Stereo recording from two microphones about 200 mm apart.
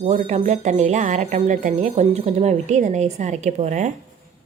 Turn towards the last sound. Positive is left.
turn(degrees=-35)  # may be behind; listen again after turning